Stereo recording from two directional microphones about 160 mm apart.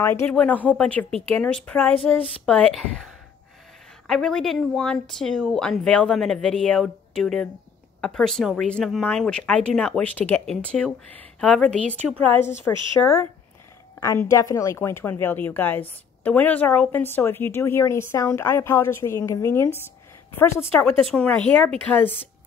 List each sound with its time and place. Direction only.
0.0 s a woman's voice: 15° left (ahead or behind)
4.1 s a woman's voice: centre (ahead or behind)
13.0 s speech: 20° left (ahead or behind)
21.0 s speech: 5° left (ahead or behind)